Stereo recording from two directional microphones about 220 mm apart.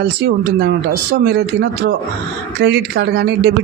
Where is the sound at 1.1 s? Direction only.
45° right (ahead or behind).